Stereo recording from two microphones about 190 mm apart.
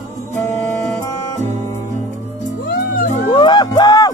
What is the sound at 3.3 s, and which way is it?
Music, 25° left (ahead or behind).